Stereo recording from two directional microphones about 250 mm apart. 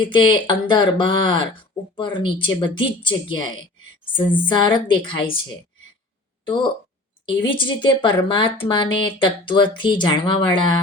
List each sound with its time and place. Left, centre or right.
0.1 s speech: centre
6.4 s speech: centre